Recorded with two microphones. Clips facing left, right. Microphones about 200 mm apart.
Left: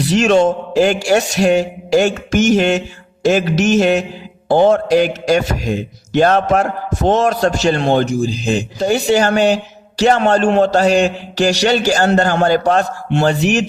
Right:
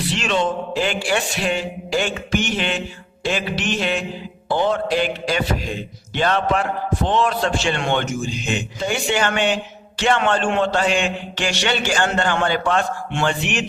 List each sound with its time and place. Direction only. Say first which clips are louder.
0.0 s a man's voice: left 9 dB; 45° left (ahead or behind)